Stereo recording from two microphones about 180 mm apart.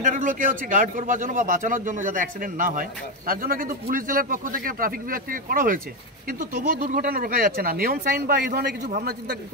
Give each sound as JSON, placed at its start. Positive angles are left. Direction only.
{"t": 0.0, "sound": "a man's voice", "side_deg": -45}